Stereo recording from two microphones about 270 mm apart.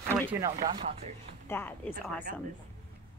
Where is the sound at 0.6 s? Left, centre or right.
Right.